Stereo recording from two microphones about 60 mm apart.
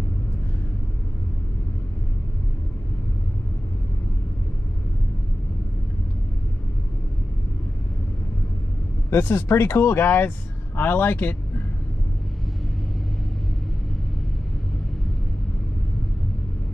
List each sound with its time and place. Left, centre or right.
9.1 s a man's voice: left